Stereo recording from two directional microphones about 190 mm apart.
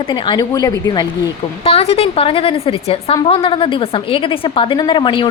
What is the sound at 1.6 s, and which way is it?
A woman's voice, 30° left (ahead or behind).